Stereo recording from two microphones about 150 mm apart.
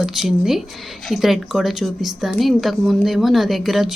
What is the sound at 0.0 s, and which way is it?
A woman's voice, centre (ahead or behind).